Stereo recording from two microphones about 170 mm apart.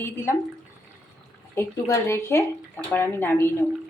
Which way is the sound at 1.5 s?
15° left (ahead or behind).